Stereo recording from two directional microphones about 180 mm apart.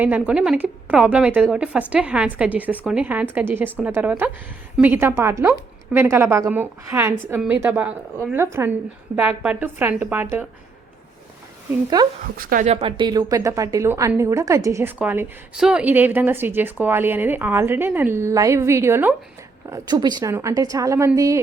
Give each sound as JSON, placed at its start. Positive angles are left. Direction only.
{"t": 0.0, "sound": "a woman's voice", "side_deg": -10}
{"t": 12.0, "sound": "speech", "side_deg": -20}
{"t": 12.4, "sound": "a woman's voice", "side_deg": -50}
{"t": 12.7, "sound": "a woman's voice", "side_deg": -30}